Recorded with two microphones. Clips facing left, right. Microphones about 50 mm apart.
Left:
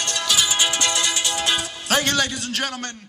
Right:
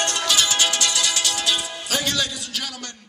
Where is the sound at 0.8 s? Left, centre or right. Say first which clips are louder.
Left 1 dB; left.